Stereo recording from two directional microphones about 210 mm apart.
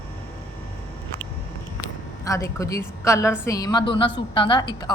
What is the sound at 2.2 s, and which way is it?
A woman's voice, 15° left (ahead or behind).